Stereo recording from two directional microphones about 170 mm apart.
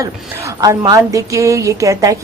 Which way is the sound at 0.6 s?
20° right (ahead or behind).